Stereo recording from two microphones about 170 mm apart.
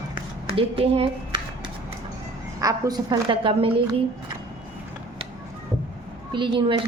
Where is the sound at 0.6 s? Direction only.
35° right (ahead or behind).